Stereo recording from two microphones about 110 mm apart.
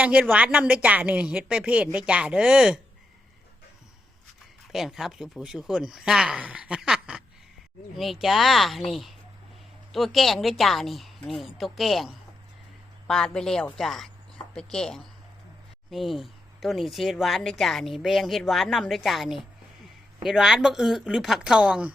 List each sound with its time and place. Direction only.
0.0 s a woman's voice: 10° right (ahead or behind)
4.7 s speech: 5° right (ahead or behind)